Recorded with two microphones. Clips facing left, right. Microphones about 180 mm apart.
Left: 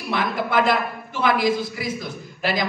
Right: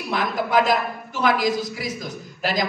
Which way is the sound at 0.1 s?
40° right (ahead or behind).